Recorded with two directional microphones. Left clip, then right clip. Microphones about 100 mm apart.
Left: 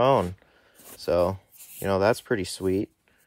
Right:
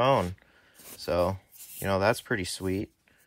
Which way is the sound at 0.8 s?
30° left (ahead or behind).